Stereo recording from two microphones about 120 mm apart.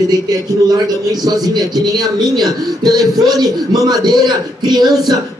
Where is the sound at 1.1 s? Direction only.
35° right (ahead or behind).